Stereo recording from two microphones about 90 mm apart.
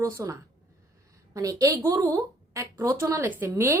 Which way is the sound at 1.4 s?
40° right (ahead or behind).